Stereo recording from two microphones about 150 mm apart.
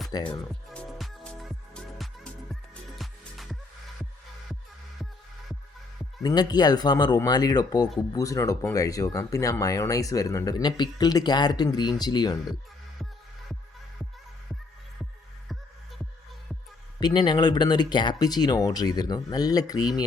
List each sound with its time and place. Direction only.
0.1 s speech: 30° left (ahead or behind)
0.7 s music: 5° left (ahead or behind)
6.2 s speech: 30° left (ahead or behind)
17.0 s speech: 30° left (ahead or behind)